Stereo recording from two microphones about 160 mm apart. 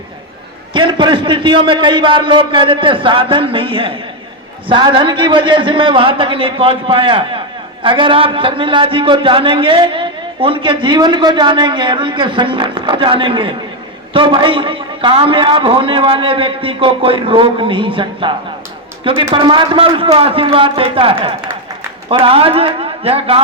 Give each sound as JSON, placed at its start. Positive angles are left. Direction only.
{"t": 0.7, "sound": "a man's voice", "side_deg": -30}